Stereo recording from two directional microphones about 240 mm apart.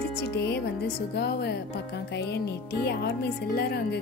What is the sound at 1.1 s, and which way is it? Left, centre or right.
Speech, left.